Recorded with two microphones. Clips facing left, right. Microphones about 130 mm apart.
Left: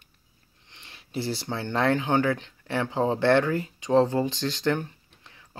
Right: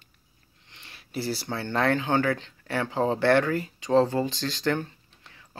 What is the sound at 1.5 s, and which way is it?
Speech, 20° left (ahead or behind).